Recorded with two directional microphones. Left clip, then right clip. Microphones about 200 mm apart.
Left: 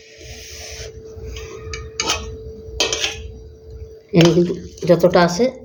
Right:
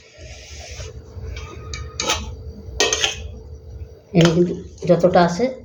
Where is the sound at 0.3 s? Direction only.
50° left (ahead or behind).